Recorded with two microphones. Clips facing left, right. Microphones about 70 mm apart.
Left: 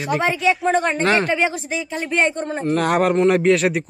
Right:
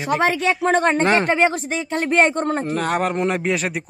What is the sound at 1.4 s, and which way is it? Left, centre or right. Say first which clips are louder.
A woman's voice: right 3 dB; right.